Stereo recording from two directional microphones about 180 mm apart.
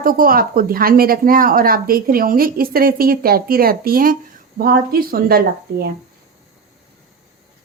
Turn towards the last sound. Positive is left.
turn(degrees=-55)  # may be behind; listen again after turning